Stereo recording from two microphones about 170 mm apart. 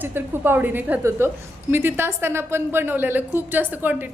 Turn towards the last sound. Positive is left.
turn(degrees=-10)  # may be behind; listen again after turning